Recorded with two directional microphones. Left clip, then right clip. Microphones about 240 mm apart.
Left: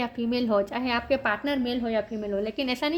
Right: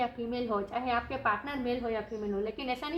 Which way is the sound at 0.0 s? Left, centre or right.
Left.